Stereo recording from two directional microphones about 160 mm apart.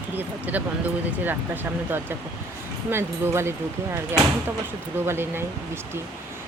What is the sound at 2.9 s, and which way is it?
Speech, 15° right (ahead or behind).